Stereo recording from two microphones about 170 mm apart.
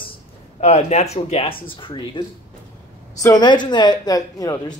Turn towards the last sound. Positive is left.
turn(degrees=20)  # may be behind; listen again after turning